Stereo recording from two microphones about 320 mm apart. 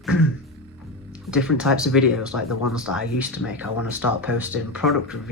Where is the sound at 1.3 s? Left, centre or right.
Centre.